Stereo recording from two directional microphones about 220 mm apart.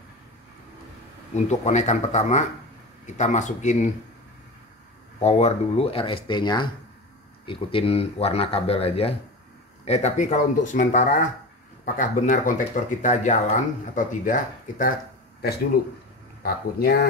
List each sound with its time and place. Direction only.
1.3 s speech: 30° left (ahead or behind)
5.2 s speech: 30° left (ahead or behind)
16.4 s speech: 45° left (ahead or behind)